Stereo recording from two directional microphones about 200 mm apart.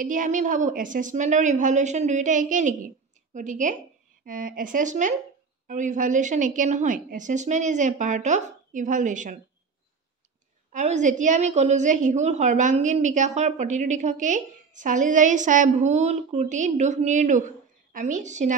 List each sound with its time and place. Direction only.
0.0 s a woman's voice: 40° right (ahead or behind)
10.7 s a woman's voice: 35° right (ahead or behind)